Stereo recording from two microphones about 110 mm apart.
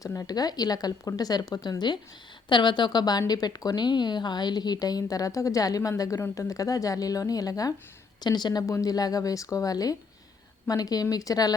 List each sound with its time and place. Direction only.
0.0 s a woman's voice: 30° left (ahead or behind)